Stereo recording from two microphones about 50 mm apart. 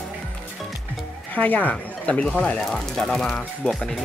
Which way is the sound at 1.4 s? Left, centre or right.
Left.